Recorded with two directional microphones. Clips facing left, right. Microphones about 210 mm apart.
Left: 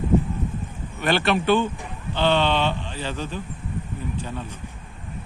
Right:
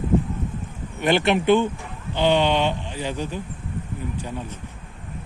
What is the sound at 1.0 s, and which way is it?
Speech, 20° right (ahead or behind).